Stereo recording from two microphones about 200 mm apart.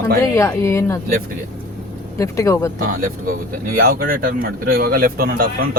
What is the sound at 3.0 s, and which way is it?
Speech, 45° right (ahead or behind).